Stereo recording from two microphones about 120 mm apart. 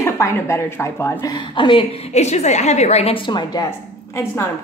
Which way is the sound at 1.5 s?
45° left (ahead or behind).